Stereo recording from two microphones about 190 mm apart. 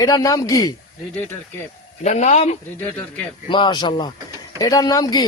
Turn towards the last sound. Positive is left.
turn(degrees=20)  # may be behind; listen again after turning